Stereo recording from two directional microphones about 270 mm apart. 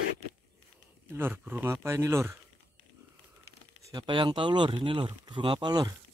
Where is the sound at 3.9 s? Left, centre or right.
Centre.